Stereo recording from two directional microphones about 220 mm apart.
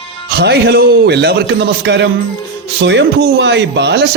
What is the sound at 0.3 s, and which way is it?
Speech, 45° right (ahead or behind).